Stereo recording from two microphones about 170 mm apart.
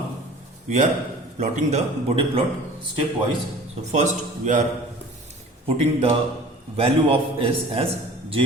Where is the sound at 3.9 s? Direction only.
45° right (ahead or behind).